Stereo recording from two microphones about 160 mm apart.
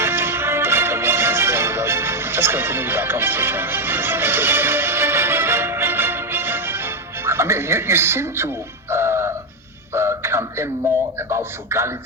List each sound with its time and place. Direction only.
0.0 s music: 15° right (ahead or behind)
9.9 s a sound: 15° right (ahead or behind)
11.2 s a man's voice: 15° right (ahead or behind)